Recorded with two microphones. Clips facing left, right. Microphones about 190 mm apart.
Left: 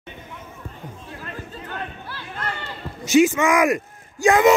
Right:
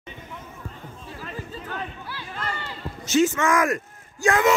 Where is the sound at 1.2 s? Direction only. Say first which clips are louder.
Right 1 dB; 5° right (ahead or behind).